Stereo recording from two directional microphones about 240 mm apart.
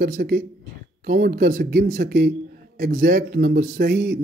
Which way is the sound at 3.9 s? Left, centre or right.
Right.